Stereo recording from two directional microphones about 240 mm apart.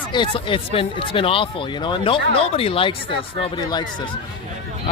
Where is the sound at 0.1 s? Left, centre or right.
Centre.